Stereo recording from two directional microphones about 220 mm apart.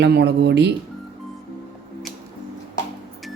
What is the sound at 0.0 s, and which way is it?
Speech, 50° right (ahead or behind).